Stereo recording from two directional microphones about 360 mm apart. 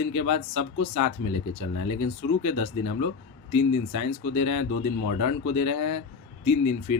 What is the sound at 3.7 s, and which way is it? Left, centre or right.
Speech, left.